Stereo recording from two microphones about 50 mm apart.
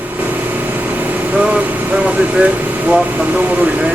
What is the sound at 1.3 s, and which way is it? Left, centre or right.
Vehicle, centre.